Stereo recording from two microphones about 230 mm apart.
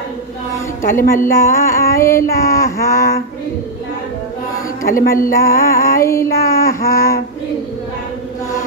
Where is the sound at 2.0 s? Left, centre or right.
Centre.